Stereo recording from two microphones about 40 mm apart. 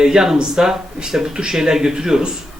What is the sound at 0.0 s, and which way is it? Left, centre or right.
Speech, centre.